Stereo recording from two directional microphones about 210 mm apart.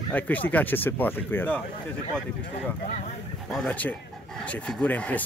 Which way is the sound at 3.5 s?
5° left (ahead or behind).